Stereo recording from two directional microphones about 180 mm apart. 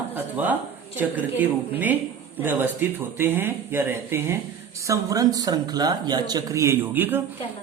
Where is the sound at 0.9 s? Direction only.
10° right (ahead or behind).